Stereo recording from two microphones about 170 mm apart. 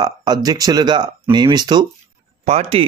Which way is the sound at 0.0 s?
25° right (ahead or behind).